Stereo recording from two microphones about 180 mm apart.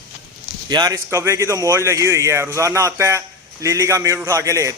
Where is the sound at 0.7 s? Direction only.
20° right (ahead or behind).